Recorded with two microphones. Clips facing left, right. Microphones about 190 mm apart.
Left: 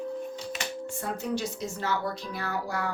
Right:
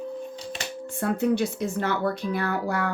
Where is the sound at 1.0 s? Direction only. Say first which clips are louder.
Right 9 dB; 60° right (ahead or behind).